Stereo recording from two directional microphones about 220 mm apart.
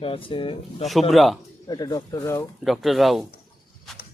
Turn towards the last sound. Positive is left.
turn(degrees=0)  # may be behind; listen again after turning